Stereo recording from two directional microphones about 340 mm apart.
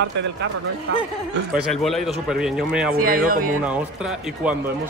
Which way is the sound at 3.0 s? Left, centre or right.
Right.